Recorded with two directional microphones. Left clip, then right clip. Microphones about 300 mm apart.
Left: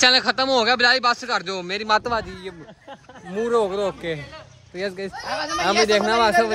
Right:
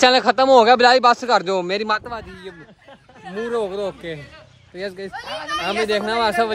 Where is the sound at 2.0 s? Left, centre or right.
Centre.